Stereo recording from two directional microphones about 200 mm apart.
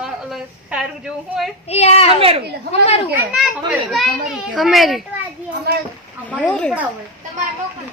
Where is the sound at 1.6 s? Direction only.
30° left (ahead or behind).